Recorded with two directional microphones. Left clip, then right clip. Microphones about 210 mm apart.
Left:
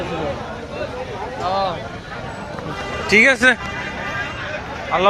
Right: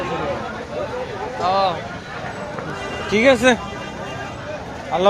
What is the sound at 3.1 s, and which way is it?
Speech, 10° left (ahead or behind).